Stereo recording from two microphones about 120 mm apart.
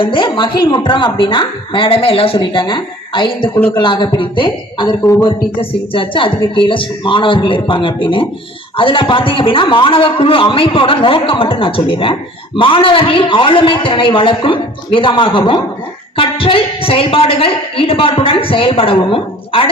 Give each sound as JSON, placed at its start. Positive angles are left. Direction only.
{"t": 0.0, "sound": "speech", "side_deg": 45}